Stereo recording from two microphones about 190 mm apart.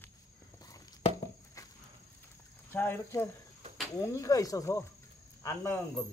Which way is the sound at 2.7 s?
10° left (ahead or behind).